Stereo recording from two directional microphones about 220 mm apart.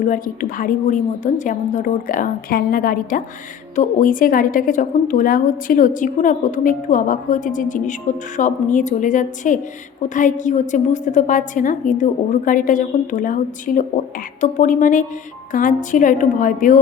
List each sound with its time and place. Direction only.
0.0 s a woman's voice: 40° left (ahead or behind)